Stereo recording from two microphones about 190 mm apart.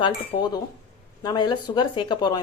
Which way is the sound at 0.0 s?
20° left (ahead or behind).